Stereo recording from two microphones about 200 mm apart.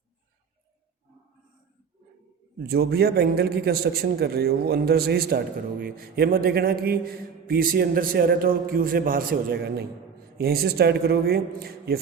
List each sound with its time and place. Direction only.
2.6 s a man's voice: 55° right (ahead or behind)